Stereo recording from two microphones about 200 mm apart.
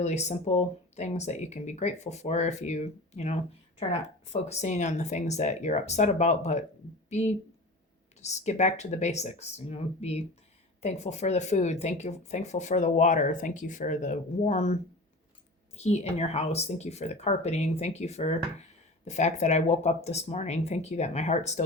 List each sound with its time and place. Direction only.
0.0 s speech: 35° left (ahead or behind)